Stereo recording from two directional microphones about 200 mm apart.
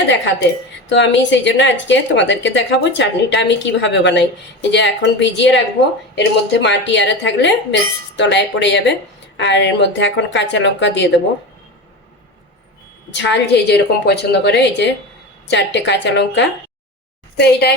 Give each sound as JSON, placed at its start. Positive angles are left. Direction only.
{"t": 0.9, "sound": "a woman's voice", "side_deg": 65}
{"t": 13.1, "sound": "a woman's voice", "side_deg": 60}